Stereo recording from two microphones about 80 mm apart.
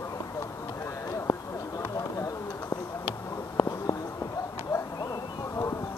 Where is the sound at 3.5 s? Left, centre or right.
Left.